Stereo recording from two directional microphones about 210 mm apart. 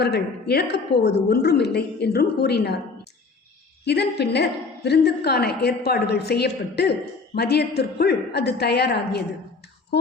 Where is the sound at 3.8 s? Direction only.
50° left (ahead or behind).